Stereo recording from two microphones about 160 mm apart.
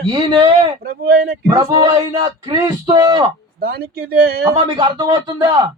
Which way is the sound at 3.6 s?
70° right (ahead or behind).